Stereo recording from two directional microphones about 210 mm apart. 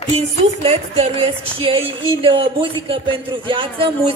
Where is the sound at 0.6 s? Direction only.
30° right (ahead or behind).